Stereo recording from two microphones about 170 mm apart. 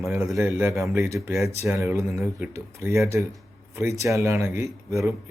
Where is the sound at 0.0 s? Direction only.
5° right (ahead or behind).